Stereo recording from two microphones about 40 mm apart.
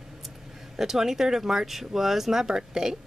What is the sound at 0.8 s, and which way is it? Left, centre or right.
Speech, centre.